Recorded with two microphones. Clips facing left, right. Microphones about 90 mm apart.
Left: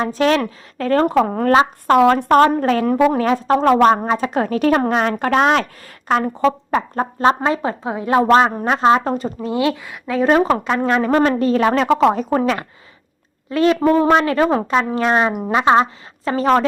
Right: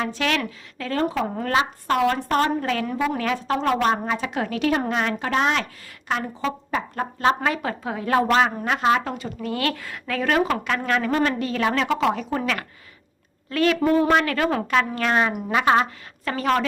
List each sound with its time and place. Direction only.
0.0 s speech: 35° left (ahead or behind)
1.2 s speech: 70° left (ahead or behind)
1.5 s a woman's voice: 45° left (ahead or behind)
2.6 s speech: 40° left (ahead or behind)
2.8 s a woman's voice: 50° left (ahead or behind)
3.2 s a woman's voice: 35° left (ahead or behind)
6.9 s speech: 30° left (ahead or behind)
8.3 s speech: 35° left (ahead or behind)
9.5 s speech: 20° left (ahead or behind); by 12.5 s 40° left (ahead or behind)
13.5 s speech: 25° left (ahead or behind)